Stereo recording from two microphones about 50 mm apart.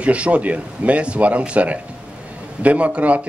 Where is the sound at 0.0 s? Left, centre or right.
Right.